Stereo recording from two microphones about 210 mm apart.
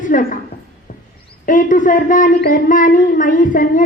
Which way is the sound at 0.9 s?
40° left (ahead or behind).